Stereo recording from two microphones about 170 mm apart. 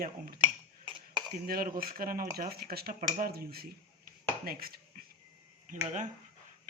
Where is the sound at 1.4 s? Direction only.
60° right (ahead or behind).